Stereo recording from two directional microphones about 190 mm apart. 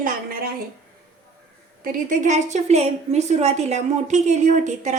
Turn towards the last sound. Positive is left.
turn(degrees=-40)  # may be behind; listen again after turning